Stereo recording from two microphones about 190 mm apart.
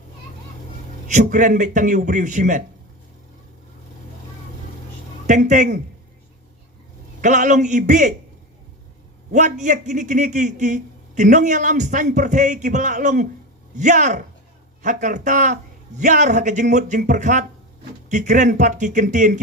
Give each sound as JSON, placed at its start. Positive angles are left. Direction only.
{"t": 1.0, "sound": "a man's voice", "side_deg": -40}
{"t": 5.2, "sound": "speech", "side_deg": -40}
{"t": 7.2, "sound": "a man's voice", "side_deg": -40}
{"t": 9.3, "sound": "a man's voice", "side_deg": -40}